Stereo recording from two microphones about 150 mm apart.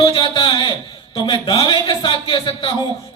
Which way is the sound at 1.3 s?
35° left (ahead or behind).